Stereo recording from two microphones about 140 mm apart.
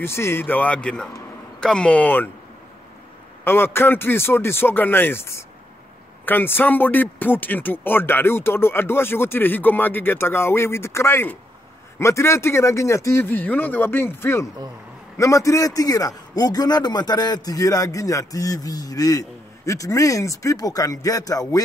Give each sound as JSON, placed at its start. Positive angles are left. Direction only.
{"t": 0.0, "sound": "speech", "side_deg": 20}
{"t": 3.4, "sound": "a man's voice", "side_deg": 15}